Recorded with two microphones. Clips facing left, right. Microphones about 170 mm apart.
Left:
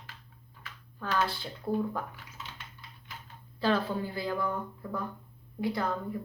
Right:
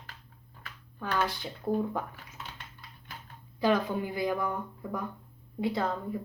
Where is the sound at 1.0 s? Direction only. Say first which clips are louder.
Even; 15° right (ahead or behind).